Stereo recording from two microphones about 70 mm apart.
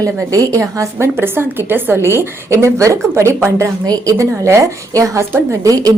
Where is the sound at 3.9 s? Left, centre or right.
Right.